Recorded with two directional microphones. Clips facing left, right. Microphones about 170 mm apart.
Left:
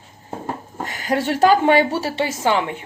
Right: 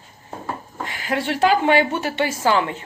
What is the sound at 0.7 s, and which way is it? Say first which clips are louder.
A woman's voice: left 3 dB; 40° left (ahead or behind).